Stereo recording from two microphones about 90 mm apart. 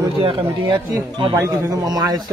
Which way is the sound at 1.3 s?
35° right (ahead or behind).